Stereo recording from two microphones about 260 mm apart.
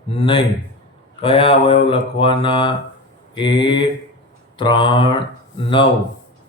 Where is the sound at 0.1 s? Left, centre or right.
Left.